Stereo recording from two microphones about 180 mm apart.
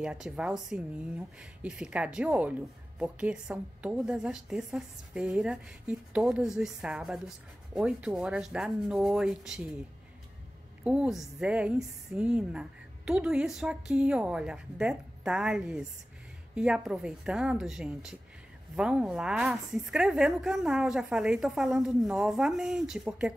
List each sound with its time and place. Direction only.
0.0 s a woman's voice: 5° right (ahead or behind)
10.8 s a woman's voice: 5° right (ahead or behind)